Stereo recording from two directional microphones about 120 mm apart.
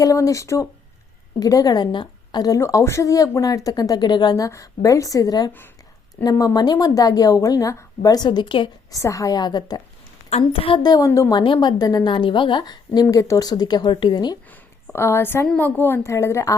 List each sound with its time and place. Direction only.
0.0 s a woman's voice: 30° left (ahead or behind)
8.9 s a woman's voice: 25° left (ahead or behind)
10.2 s a woman's voice: 55° left (ahead or behind)
10.8 s a woman's voice: 30° left (ahead or behind)
14.9 s a woman's voice: 20° left (ahead or behind)